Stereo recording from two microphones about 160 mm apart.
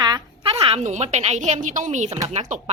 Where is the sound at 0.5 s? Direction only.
40° right (ahead or behind).